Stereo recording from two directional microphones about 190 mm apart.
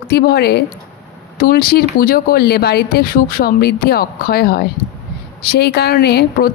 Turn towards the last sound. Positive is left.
turn(degrees=55)  # may be behind; listen again after turning